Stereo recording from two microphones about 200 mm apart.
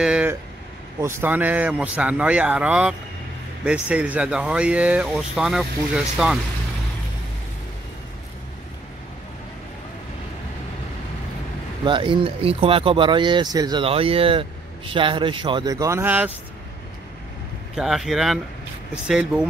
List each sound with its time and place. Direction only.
0.0 s speech: 5° right (ahead or behind)
11.8 s speech: 25° right (ahead or behind); by 16.3 s 10° right (ahead or behind)
17.7 s speech: centre (ahead or behind)